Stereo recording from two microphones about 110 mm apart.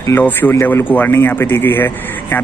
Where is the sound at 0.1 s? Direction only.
20° left (ahead or behind).